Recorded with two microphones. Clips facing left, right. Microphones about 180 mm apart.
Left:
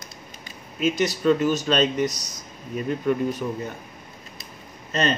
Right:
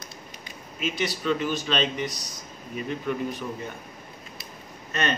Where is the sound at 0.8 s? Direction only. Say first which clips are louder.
Left 7 dB; 45° left (ahead or behind).